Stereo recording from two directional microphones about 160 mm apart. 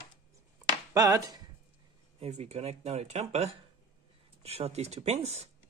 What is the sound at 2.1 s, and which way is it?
Speech, 40° right (ahead or behind).